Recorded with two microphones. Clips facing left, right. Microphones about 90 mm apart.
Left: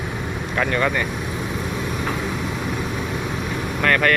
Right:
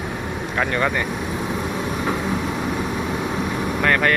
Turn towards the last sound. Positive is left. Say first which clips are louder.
# even
turn(degrees=-15)  # may be behind; listen again after turning